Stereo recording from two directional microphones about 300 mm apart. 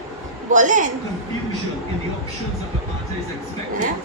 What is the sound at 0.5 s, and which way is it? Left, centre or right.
Speech, right.